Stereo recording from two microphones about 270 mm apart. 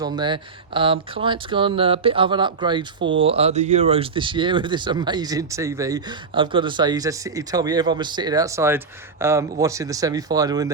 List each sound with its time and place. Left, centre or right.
0.0 s speech: centre